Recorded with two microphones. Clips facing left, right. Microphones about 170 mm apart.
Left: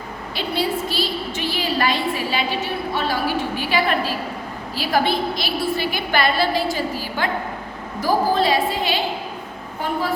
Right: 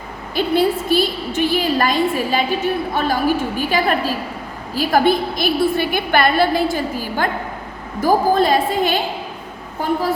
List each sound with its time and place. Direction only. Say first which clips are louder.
0.3 s a woman's voice: right 7 dB; 50° right (ahead or behind)